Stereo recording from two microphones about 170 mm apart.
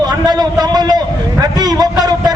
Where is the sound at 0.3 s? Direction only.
25° right (ahead or behind).